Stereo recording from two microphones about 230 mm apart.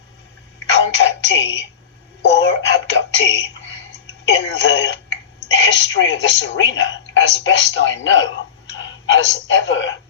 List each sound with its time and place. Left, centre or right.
0.7 s a sound: left
2.2 s music: left
4.3 s a woman's voice: left